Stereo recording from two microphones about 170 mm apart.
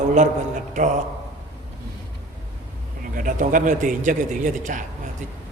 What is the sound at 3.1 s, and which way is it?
A man's voice, 50° right (ahead or behind).